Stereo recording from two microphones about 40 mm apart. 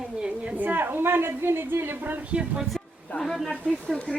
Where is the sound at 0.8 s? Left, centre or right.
Right.